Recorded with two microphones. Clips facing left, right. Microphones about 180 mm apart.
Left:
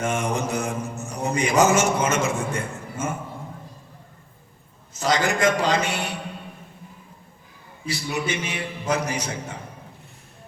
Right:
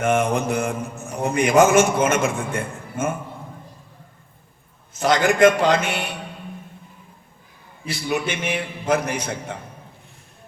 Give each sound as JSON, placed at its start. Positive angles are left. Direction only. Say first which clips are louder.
{"t": 0.0, "sound": "mantra", "louder": "right 5 dB", "side_deg": -55}
{"t": 4.9, "sound": "mantra", "louder": "right 5 dB", "side_deg": -55}
{"t": 7.9, "sound": "mantra", "louder": "right 2 dB", "side_deg": -55}